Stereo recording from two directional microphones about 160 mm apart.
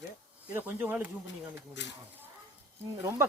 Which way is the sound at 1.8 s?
90° left.